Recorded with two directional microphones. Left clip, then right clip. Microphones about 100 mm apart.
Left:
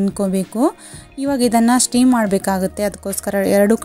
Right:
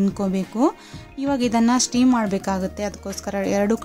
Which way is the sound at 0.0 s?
35° left (ahead or behind).